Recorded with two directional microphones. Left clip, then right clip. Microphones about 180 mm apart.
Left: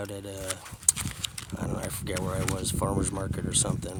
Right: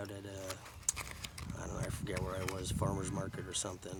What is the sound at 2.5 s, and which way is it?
Speech, 55° left (ahead or behind).